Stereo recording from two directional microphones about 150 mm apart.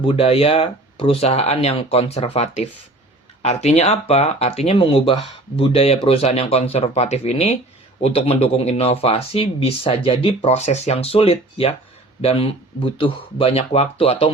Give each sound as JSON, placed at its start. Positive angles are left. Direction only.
{"t": 0.0, "sound": "speech", "side_deg": 40}